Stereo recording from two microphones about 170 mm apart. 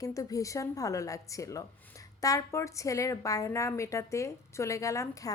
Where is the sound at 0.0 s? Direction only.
20° left (ahead or behind).